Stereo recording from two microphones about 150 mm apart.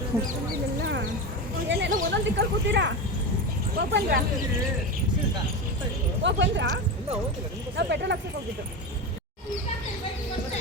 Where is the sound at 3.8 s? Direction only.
90° right.